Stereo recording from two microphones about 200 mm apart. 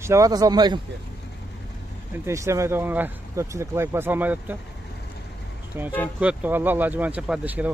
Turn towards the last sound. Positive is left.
turn(degrees=-5)  # may be behind; listen again after turning